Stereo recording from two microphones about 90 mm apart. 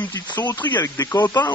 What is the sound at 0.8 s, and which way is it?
Speech, 40° left (ahead or behind).